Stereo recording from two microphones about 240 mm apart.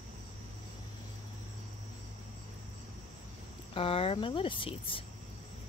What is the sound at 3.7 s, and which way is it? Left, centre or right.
Speech, left.